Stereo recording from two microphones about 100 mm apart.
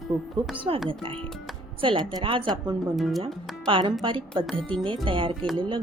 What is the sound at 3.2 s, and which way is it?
Speech, 60° right (ahead or behind).